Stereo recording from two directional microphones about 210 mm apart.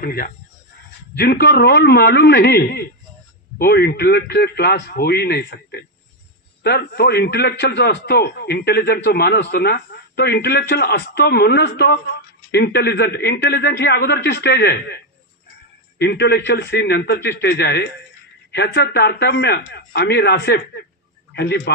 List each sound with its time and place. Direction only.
0.0 s a man's voice: 45° left (ahead or behind)
16.0 s a man's voice: 55° left (ahead or behind)